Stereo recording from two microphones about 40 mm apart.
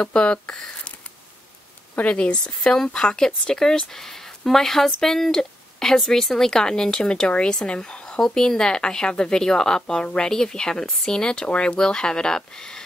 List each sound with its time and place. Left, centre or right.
0.0 s speech: left
2.0 s speech: left; by 12.8 s centre